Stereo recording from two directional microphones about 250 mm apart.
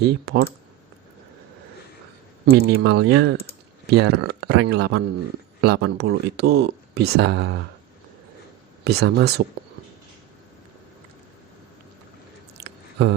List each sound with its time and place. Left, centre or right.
0.0 s speech: right
2.4 s speech: right
8.8 s speech: right
12.5 s a sound: right